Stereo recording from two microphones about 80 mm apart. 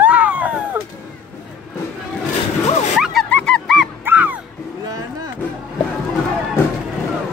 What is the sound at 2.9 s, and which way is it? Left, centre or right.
Music, centre.